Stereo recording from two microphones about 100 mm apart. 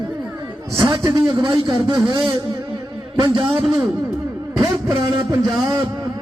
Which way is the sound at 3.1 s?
50° right (ahead or behind).